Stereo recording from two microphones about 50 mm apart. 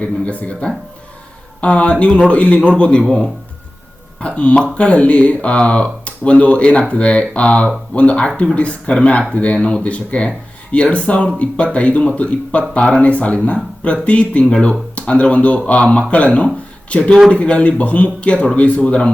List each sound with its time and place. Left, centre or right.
0.0 s speech: left
4.2 s speech: left